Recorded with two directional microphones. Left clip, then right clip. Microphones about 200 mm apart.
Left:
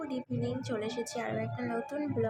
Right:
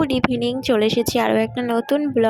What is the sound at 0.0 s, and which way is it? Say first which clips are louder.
A woman's voice: right 17 dB; 45° right (ahead or behind).